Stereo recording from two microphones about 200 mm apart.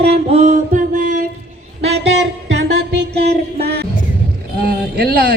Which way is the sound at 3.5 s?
50° right (ahead or behind).